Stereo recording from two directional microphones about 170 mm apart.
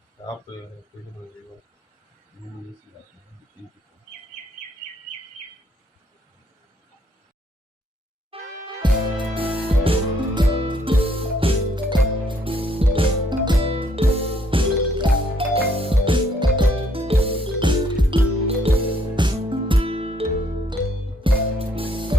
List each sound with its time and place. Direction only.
8.3 s music: 30° right (ahead or behind)